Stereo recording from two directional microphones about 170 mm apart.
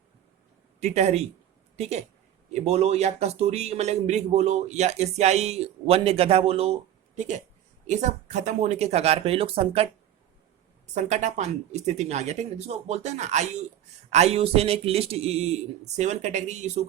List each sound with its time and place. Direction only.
0.8 s a man's voice: 40° right (ahead or behind)
7.9 s a man's voice: 45° right (ahead or behind)
10.9 s a man's voice: 45° right (ahead or behind)